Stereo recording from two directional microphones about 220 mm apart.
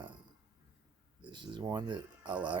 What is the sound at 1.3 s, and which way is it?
Speech, 20° right (ahead or behind).